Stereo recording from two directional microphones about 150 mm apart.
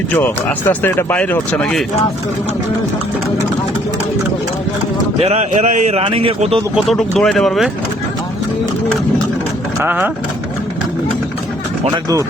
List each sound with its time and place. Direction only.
0.7 s speech: 15° left (ahead or behind)
5.2 s a man's voice: 45° right (ahead or behind)
6.7 s speech: centre (ahead or behind)
9.8 s speech: 10° right (ahead or behind)